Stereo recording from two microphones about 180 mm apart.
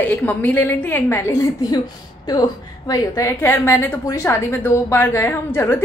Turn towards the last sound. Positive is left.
turn(degrees=15)  # may be behind; listen again after turning